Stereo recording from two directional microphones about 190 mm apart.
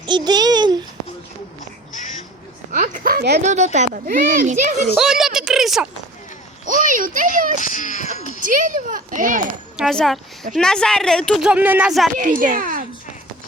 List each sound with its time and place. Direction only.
0.0 s a child's voice: 20° right (ahead or behind)
2.7 s speech: 45° right (ahead or behind)
3.4 s speech: 40° right (ahead or behind)
4.9 s a woman's voice: centre (ahead or behind)
6.7 s speech: 45° right (ahead or behind)
7.6 s speech: 40° left (ahead or behind)
8.4 s speech: 45° right (ahead or behind)
9.7 s speech: centre (ahead or behind)
12.1 s speech: 45° right (ahead or behind)